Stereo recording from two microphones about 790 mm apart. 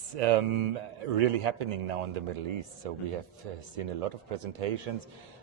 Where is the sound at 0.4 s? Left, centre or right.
Right.